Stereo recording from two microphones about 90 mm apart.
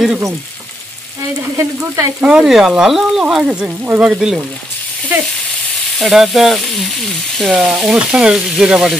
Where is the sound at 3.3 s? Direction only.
10° right (ahead or behind).